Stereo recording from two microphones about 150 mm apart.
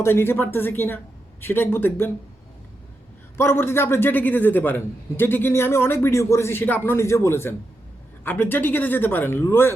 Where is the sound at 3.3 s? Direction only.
15° left (ahead or behind).